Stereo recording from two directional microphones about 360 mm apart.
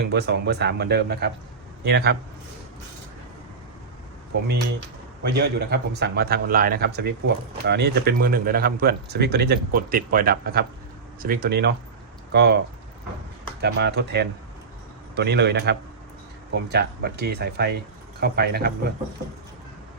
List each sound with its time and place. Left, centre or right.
0.1 s a man's voice: right
5.2 s a man's voice: right
13.6 s a man's voice: right